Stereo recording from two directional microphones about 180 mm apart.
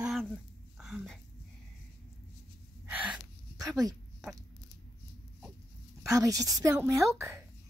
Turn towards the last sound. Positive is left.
turn(degrees=-15)  # may be behind; listen again after turning